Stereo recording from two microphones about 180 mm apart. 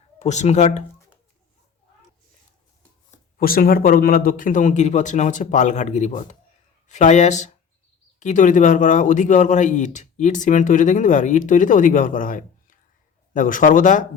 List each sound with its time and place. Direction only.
0.2 s speech: 40° left (ahead or behind)
3.1 s speech: 50° left (ahead or behind)